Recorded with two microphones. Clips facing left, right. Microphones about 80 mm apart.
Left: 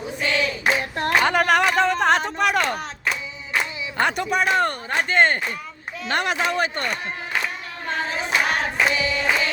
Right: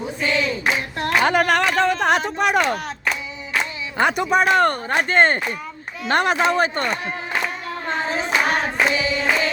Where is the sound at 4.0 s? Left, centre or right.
Centre.